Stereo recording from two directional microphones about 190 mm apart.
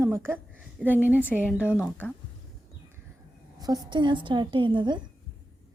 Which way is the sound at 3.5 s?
20° right (ahead or behind).